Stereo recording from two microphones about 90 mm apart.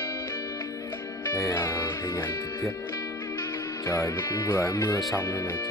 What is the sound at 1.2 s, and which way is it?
Speech, 35° left (ahead or behind).